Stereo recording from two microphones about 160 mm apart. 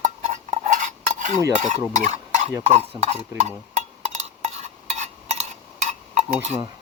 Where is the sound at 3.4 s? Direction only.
45° right (ahead or behind).